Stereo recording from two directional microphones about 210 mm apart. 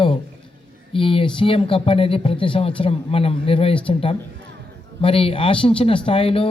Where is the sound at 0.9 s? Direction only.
25° left (ahead or behind).